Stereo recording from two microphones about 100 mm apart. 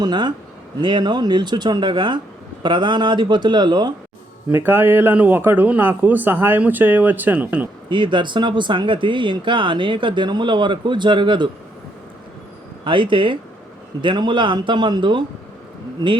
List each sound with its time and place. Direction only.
0.0 s speech: 50° right (ahead or behind)
4.4 s speech: 20° right (ahead or behind)
7.9 s speech: 55° right (ahead or behind)
12.8 s speech: 55° right (ahead or behind)